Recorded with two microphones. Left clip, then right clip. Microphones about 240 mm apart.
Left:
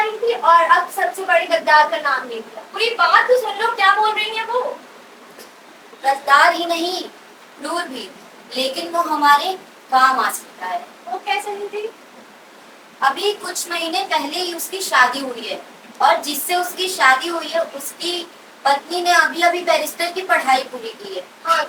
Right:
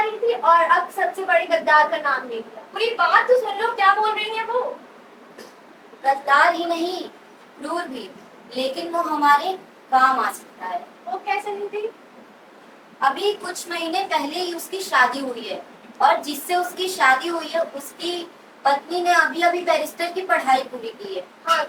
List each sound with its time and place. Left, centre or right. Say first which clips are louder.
0.0 s a woman's voice: left 2 dB; centre
6.0 s a woman's voice: left 3 dB; centre
13.0 s a woman's voice: left 2 dB; centre